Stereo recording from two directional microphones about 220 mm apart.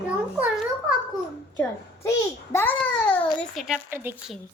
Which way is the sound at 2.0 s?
10° left (ahead or behind).